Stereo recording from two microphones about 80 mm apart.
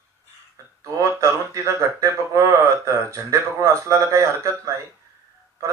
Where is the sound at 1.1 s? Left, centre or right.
Right.